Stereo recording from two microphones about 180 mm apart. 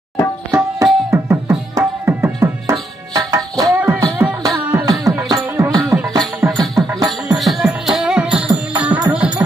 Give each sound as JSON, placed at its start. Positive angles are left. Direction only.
{"t": 0.5, "sound": "tabla", "side_deg": -15}
{"t": 1.1, "sound": "music", "side_deg": -15}
{"t": 6.6, "sound": "music", "side_deg": 0}